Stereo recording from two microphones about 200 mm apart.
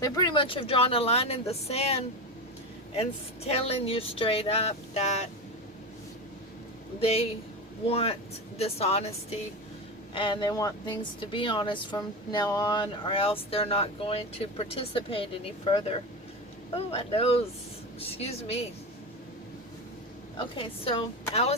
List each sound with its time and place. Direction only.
0.0 s speech: 20° left (ahead or behind)
7.0 s speech: 30° left (ahead or behind)